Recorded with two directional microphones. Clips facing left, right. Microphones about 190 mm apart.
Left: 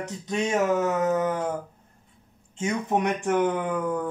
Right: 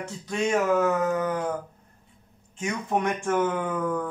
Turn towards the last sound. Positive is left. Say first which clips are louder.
# left 1 dB
turn(degrees=15)  # may be behind; listen again after turning